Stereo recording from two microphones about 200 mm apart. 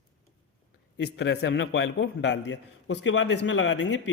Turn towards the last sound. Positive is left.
turn(degrees=65)  # may be behind; listen again after turning